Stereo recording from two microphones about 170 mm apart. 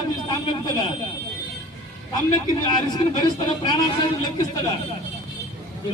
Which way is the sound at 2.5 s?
25° left (ahead or behind).